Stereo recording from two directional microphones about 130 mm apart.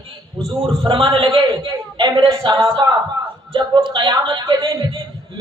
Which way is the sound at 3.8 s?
40° right (ahead or behind).